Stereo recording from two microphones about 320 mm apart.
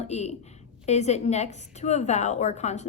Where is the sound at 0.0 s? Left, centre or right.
Left.